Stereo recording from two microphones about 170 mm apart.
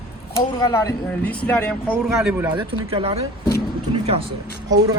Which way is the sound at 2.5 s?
30° right (ahead or behind).